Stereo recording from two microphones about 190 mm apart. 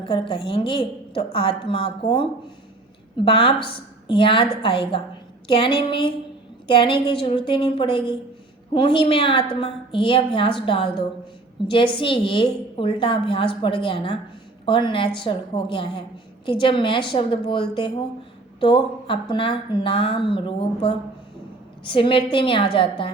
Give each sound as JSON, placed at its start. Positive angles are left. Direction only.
{"t": 0.0, "sound": "a woman's voice", "side_deg": 25}